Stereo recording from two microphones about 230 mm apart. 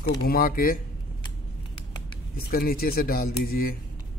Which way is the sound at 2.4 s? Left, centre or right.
Left.